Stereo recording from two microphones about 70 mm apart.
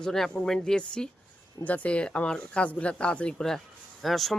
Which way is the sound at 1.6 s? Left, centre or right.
Left.